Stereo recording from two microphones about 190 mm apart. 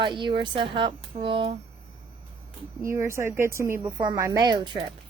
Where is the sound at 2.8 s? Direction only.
15° right (ahead or behind).